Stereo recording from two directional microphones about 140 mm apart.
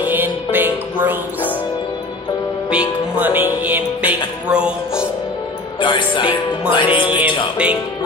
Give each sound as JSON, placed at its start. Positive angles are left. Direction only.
{"t": 0.0, "sound": "music", "side_deg": -15}
{"t": 2.7, "sound": "music", "side_deg": -10}
{"t": 5.8, "sound": "speech", "side_deg": 35}
{"t": 7.1, "sound": "music", "side_deg": -10}